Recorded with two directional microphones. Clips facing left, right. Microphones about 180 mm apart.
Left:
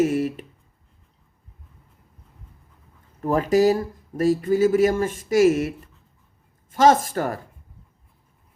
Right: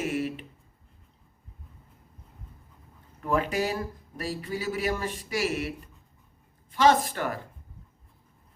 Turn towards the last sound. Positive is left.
turn(degrees=40)  # may be behind; listen again after turning